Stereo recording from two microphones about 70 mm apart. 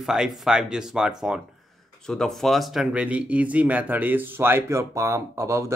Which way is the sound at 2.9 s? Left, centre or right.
Centre.